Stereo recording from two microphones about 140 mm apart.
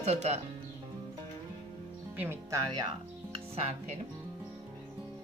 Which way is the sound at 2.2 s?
15° right (ahead or behind).